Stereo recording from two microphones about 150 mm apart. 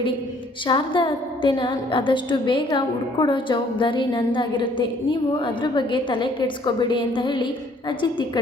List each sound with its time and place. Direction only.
0.7 s a woman's voice: 30° left (ahead or behind)